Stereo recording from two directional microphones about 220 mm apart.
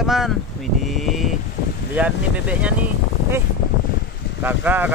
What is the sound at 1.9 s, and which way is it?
Speech, 5° right (ahead or behind).